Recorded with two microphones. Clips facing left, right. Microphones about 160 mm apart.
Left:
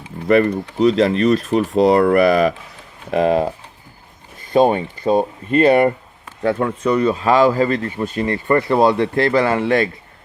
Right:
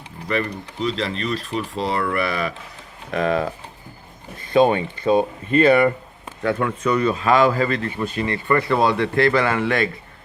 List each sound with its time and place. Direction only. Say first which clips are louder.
0.3 s speech: left 10 dB; 45° left (ahead or behind)
4.5 s speech: left 2 dB; 40° left (ahead or behind)